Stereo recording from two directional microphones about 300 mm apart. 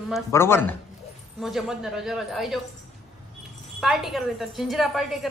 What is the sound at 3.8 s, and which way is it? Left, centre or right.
A man's voice, centre.